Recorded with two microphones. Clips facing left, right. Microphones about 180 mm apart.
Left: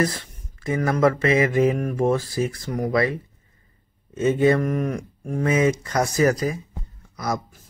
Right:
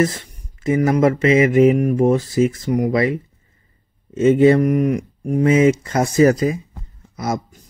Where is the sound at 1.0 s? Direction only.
20° right (ahead or behind).